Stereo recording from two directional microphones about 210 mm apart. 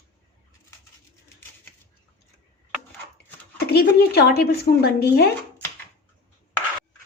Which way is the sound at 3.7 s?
50° left (ahead or behind).